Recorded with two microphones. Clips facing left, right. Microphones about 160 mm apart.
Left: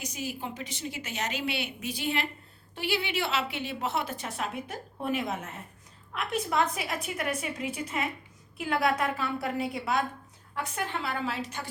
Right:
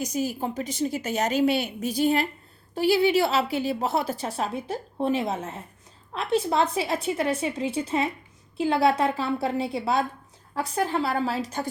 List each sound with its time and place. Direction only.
0.0 s a woman's voice: 40° right (ahead or behind)